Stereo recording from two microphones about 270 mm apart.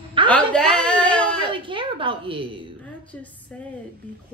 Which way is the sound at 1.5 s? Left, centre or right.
Centre.